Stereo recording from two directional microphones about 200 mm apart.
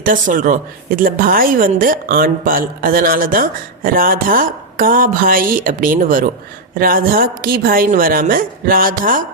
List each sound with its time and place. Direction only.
0.0 s a woman's voice: 40° right (ahead or behind)